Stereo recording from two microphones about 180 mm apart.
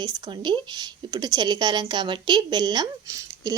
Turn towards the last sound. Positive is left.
turn(degrees=-20)  # may be behind; listen again after turning